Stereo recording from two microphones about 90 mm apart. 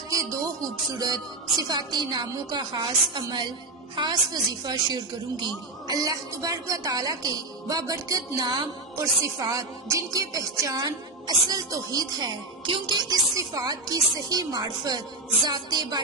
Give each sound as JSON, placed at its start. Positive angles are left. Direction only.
{"t": 0.1, "sound": "music", "side_deg": -40}
{"t": 1.5, "sound": "a woman's voice", "side_deg": -50}
{"t": 3.2, "sound": "music", "side_deg": -55}
{"t": 3.9, "sound": "a woman's voice", "side_deg": -55}
{"t": 9.0, "sound": "music", "side_deg": -40}
{"t": 12.6, "sound": "music", "side_deg": -60}
{"t": 13.3, "sound": "a woman's voice", "side_deg": -45}